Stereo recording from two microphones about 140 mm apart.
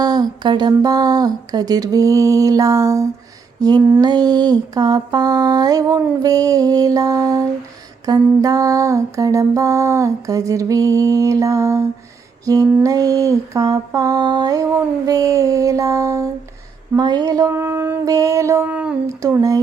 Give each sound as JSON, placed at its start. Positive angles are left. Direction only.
{"t": 0.0, "sound": "a sound", "side_deg": -30}
{"t": 0.7, "sound": "lullaby", "side_deg": -25}
{"t": 18.6, "sound": "speech", "side_deg": -10}
{"t": 19.4, "sound": "lullaby", "side_deg": -25}